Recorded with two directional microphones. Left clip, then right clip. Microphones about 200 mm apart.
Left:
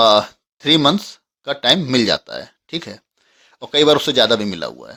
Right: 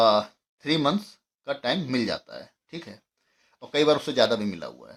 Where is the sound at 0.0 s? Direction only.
45° left (ahead or behind).